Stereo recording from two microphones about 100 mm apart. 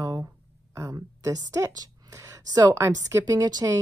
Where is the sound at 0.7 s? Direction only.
30° right (ahead or behind).